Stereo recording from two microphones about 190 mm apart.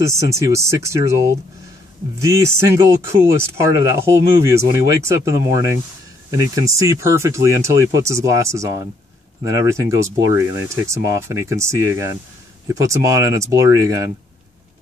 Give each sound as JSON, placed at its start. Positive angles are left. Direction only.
{"t": 0.0, "sound": "speech", "side_deg": -15}